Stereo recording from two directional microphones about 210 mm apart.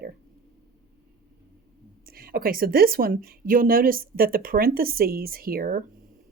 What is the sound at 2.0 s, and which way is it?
Speech, 45° right (ahead or behind).